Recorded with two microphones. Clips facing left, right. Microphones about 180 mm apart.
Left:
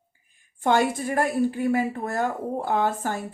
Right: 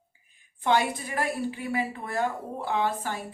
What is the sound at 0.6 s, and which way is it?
A woman's voice, 45° left (ahead or behind).